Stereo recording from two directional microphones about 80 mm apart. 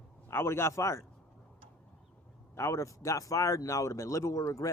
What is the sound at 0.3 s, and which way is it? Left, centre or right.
Speech, left.